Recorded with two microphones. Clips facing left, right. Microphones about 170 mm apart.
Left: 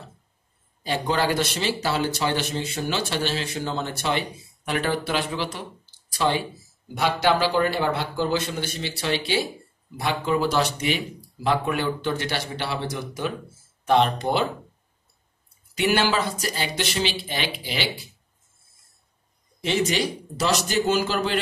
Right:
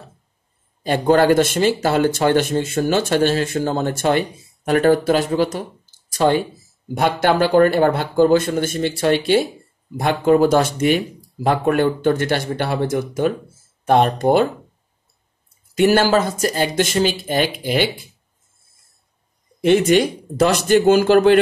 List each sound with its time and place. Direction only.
0.8 s speech: 50° right (ahead or behind)
15.7 s speech: 45° right (ahead or behind)
19.6 s speech: 55° right (ahead or behind)